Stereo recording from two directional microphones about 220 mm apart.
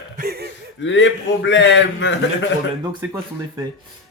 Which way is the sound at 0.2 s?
45° right (ahead or behind).